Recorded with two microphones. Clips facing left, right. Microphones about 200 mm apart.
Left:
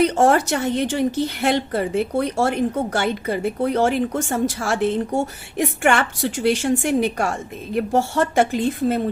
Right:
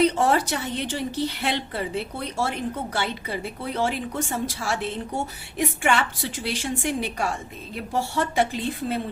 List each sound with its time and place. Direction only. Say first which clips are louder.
0.1 s a woman's voice: left 5 dB; 45° left (ahead or behind)